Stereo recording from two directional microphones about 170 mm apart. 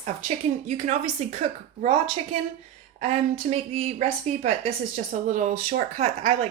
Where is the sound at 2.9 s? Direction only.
40° right (ahead or behind).